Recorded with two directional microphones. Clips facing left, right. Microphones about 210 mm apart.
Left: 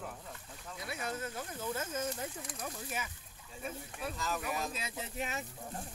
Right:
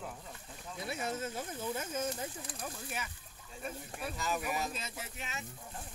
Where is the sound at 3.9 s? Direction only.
5° right (ahead or behind).